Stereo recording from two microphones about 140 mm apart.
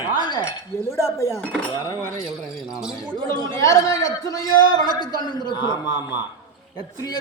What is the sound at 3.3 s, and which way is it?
A man's voice, 25° left (ahead or behind).